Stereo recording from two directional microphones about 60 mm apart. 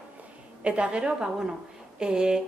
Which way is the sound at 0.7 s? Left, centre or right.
Centre.